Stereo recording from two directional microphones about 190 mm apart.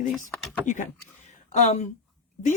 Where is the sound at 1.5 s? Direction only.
35° left (ahead or behind).